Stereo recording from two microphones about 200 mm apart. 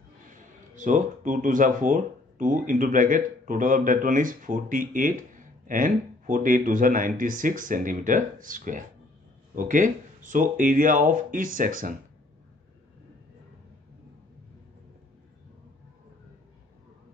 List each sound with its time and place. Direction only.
0.7 s speech: 40° right (ahead or behind)